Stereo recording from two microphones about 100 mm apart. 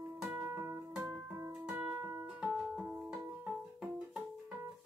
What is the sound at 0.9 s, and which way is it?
Music, 10° right (ahead or behind).